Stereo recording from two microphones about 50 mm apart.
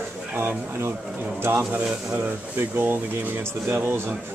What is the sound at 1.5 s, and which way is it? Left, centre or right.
Speech, right.